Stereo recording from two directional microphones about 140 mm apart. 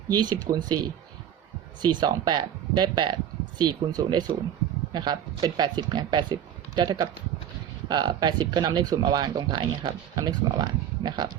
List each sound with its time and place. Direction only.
0.1 s speech: 30° right (ahead or behind)